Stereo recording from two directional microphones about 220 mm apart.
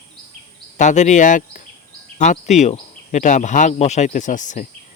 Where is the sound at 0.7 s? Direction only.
35° left (ahead or behind).